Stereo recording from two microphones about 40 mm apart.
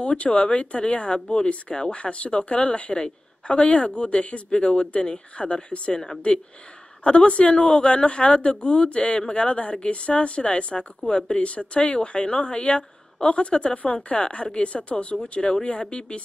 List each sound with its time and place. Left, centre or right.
0.0 s speech: left